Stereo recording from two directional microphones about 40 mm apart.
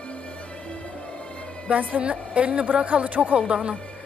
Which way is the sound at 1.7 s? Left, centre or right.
Right.